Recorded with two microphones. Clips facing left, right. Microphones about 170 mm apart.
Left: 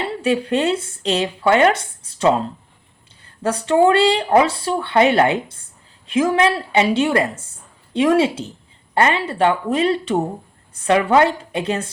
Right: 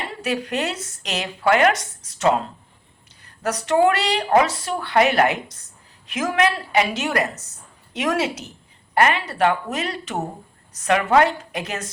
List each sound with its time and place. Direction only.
0.0 s a woman's voice: 30° left (ahead or behind)